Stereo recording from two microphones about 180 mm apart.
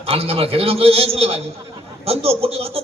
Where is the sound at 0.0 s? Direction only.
35° right (ahead or behind).